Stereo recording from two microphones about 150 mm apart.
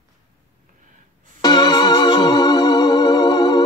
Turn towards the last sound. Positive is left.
turn(degrees=25)  # may be behind; listen again after turning